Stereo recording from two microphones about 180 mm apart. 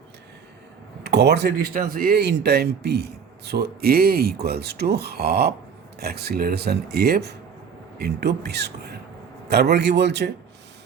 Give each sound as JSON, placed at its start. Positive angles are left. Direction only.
{"t": 1.0, "sound": "speech", "side_deg": -70}